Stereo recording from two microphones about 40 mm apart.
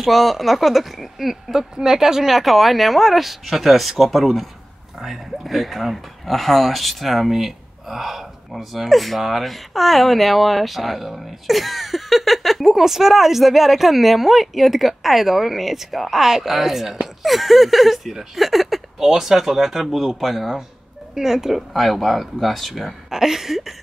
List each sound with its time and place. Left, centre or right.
0.0 s speech: centre
1.6 s speech: centre
21.1 s speech: centre